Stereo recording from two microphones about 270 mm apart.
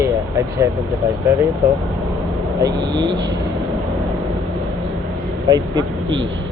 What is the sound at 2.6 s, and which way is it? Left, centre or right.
Speech, centre.